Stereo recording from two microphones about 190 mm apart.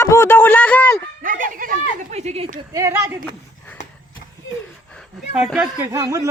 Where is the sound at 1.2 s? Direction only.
45° right (ahead or behind).